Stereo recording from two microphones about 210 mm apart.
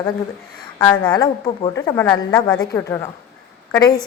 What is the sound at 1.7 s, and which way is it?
A woman's voice, 10° left (ahead or behind).